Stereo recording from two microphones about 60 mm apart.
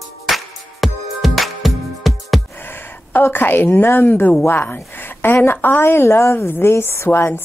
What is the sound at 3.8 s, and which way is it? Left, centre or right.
A woman's voice, left.